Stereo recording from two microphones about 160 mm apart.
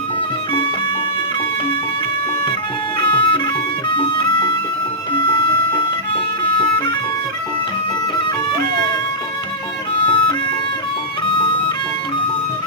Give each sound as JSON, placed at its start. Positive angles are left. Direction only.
{"t": 3.0, "sound": "music", "side_deg": 30}
{"t": 10.0, "sound": "music", "side_deg": 30}